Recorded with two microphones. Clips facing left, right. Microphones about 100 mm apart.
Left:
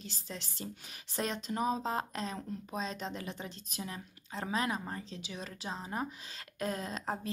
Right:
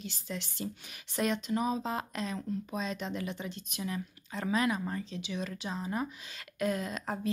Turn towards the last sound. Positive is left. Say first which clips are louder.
# right 2 dB
turn(degrees=35)  # may be behind; listen again after turning